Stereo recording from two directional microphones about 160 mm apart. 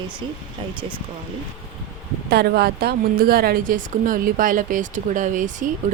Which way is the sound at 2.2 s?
80° right.